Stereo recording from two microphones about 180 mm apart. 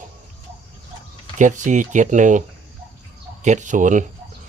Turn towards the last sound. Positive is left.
turn(degrees=-45)  # may be behind; listen again after turning